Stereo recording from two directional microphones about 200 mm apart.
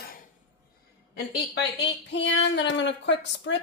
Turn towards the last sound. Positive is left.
turn(degrees=65)  # may be behind; listen again after turning